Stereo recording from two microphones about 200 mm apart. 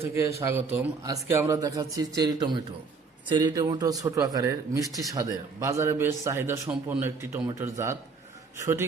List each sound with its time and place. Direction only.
0.0 s a man's voice: 15° right (ahead or behind)